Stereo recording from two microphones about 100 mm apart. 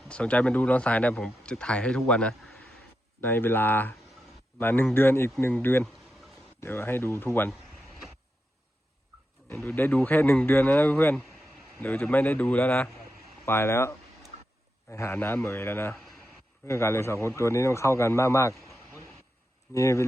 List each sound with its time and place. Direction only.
0.1 s speech: 10° left (ahead or behind)
3.2 s a man's voice: 20° left (ahead or behind)
9.6 s a man's voice: 20° left (ahead or behind)
19.7 s a man's voice: 30° left (ahead or behind)